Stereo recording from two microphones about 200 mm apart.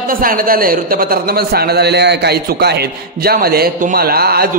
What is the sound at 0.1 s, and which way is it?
A man's voice, 45° right (ahead or behind).